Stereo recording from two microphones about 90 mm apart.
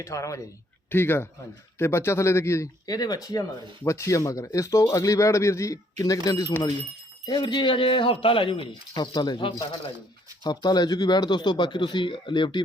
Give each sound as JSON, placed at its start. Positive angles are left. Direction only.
{"t": 0.0, "sound": "speech", "side_deg": 35}
{"t": 0.9, "sound": "speech", "side_deg": 25}
{"t": 2.8, "sound": "speech", "side_deg": 45}
{"t": 7.3, "sound": "speech", "side_deg": 55}
{"t": 10.4, "sound": "speech", "side_deg": 50}